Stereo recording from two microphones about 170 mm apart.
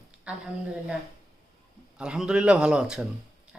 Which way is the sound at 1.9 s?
5° right (ahead or behind).